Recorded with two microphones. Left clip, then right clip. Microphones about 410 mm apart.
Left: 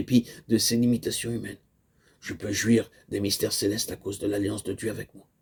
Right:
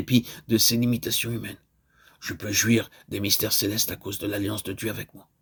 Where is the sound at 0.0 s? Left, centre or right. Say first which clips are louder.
Even; right.